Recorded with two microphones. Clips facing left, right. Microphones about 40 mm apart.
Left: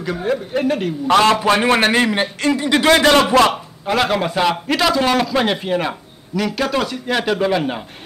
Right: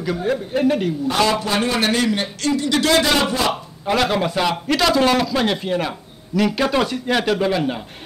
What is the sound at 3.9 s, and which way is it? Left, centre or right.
A man's voice, centre.